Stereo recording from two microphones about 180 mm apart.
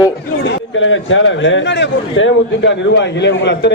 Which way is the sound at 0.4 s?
90° left.